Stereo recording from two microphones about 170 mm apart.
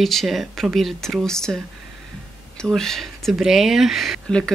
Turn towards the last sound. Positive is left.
turn(degrees=5)  # may be behind; listen again after turning